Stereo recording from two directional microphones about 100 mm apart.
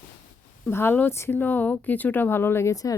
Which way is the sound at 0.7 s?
20° left (ahead or behind).